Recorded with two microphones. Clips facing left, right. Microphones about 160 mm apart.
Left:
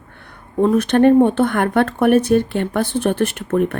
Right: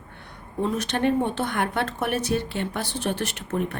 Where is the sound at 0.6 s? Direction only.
55° left (ahead or behind).